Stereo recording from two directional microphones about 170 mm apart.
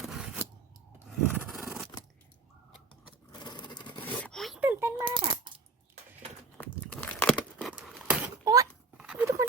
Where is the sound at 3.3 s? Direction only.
25° left (ahead or behind).